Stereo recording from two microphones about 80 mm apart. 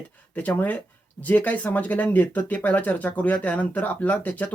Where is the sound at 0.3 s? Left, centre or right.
Centre.